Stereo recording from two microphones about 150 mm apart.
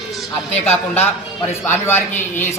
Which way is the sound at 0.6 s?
15° left (ahead or behind).